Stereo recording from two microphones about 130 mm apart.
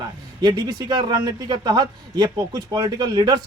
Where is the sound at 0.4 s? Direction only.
30° right (ahead or behind).